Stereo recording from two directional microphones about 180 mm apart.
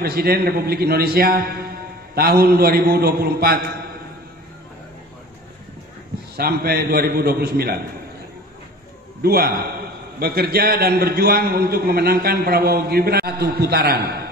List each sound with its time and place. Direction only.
0.0 s a man's voice: 60° right (ahead or behind)
6.3 s a man's voice: 60° right (ahead or behind)
9.2 s a man's voice: 55° right (ahead or behind)